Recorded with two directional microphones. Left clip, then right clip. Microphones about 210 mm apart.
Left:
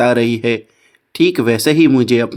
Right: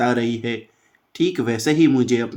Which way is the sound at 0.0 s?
35° left (ahead or behind).